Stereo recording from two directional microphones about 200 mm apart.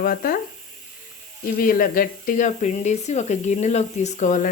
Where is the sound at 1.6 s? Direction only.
45° left (ahead or behind).